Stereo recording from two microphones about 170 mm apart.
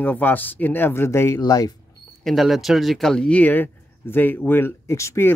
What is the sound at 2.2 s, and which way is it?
Speech, centre (ahead or behind).